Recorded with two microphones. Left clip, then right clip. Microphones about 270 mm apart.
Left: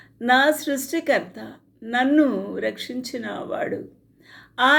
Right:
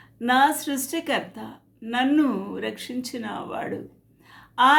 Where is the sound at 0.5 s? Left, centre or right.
Centre.